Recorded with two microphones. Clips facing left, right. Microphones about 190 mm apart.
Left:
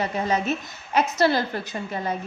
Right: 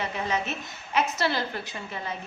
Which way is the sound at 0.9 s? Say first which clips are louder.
Left 6 dB; 40° left (ahead or behind).